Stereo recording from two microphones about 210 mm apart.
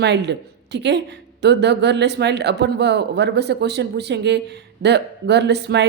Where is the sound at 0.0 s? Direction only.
55° right (ahead or behind).